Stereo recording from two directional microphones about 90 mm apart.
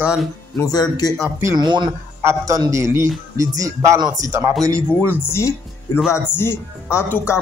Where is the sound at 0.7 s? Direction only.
45° left (ahead or behind).